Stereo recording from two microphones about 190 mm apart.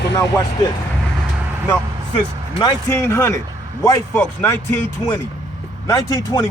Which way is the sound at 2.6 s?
15° left (ahead or behind).